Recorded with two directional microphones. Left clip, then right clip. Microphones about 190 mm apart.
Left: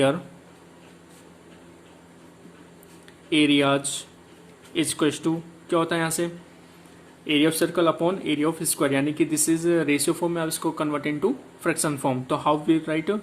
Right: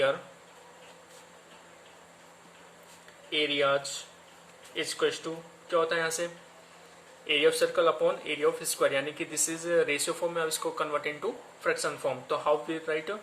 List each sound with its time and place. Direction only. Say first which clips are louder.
3.2 s speech: left 6 dB; 35° left (ahead or behind)